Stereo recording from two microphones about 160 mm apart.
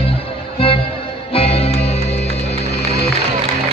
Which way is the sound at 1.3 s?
40° left (ahead or behind).